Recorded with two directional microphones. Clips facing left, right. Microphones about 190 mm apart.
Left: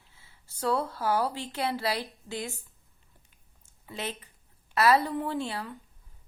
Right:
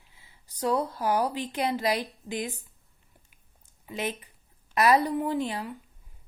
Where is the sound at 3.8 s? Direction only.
15° right (ahead or behind).